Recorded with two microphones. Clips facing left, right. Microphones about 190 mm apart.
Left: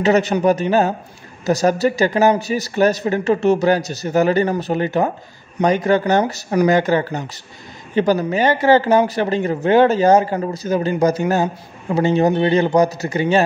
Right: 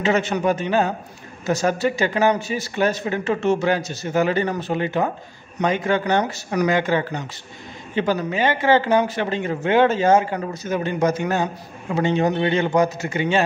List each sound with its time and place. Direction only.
0.0 s speech: 40° left (ahead or behind)